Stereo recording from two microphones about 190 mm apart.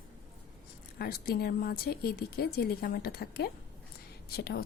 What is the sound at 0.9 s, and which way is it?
Speech, 50° left (ahead or behind).